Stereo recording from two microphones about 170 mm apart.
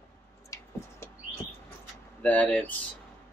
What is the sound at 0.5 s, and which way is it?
Tick-tock, 20° left (ahead or behind).